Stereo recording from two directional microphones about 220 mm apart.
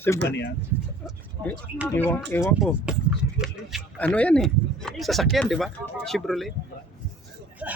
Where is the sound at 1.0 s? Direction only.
5° left (ahead or behind).